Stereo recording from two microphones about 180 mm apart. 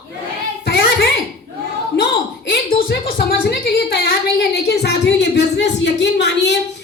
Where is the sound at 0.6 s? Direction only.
60° left (ahead or behind).